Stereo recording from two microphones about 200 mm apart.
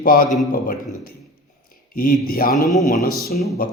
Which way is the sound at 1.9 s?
45° left (ahead or behind).